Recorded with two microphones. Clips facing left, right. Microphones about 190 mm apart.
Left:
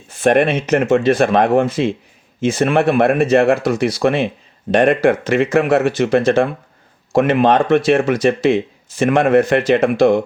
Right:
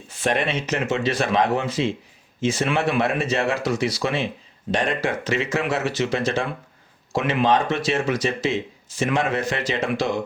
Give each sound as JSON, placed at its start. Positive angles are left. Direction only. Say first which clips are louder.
{"t": 0.1, "sound": "speech", "louder": "left 9 dB", "side_deg": 55}